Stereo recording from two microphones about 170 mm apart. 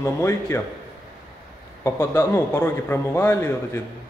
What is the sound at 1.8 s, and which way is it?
A man's voice, 15° left (ahead or behind).